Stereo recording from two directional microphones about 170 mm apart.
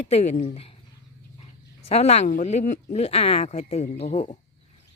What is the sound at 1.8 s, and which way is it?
Speech, 40° left (ahead or behind).